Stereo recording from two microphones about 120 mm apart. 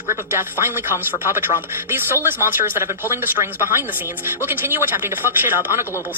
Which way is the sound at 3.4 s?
60° left (ahead or behind).